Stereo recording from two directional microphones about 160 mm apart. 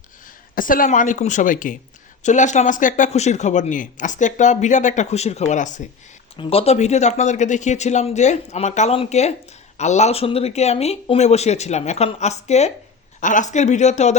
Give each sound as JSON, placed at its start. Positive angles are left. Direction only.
{"t": 0.5, "sound": "a woman's voice", "side_deg": 60}
{"t": 6.3, "sound": "a man's voice", "side_deg": 35}